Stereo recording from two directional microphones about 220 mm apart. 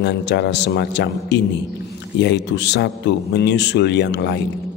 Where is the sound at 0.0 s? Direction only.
50° left (ahead or behind).